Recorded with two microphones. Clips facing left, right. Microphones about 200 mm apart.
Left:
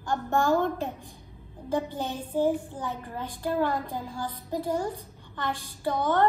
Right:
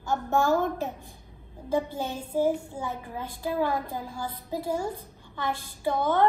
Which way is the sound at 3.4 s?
10° right (ahead or behind).